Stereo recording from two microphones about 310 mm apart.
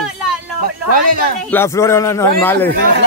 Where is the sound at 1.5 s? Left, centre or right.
Centre.